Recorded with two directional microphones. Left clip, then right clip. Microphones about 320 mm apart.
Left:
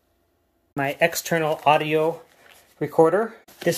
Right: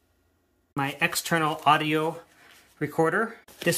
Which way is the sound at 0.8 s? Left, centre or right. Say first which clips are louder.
Left 5 dB; right.